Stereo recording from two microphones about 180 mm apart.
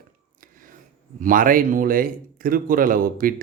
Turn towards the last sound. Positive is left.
turn(degrees=-50)  # may be behind; listen again after turning